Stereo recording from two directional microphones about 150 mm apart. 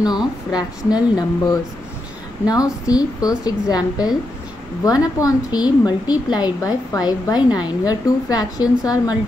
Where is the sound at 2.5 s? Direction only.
25° left (ahead or behind).